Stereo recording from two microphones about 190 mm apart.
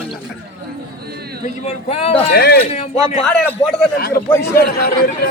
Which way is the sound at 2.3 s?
55° left (ahead or behind).